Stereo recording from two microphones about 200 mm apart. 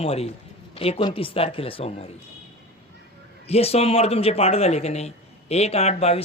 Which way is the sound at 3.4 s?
30° left (ahead or behind).